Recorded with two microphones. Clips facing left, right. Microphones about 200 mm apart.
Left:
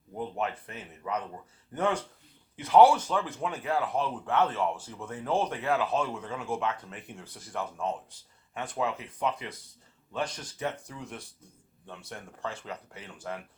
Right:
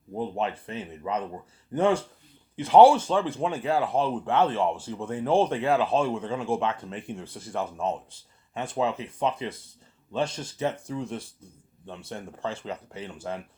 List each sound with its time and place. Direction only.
0.1 s a man's voice: 25° right (ahead or behind)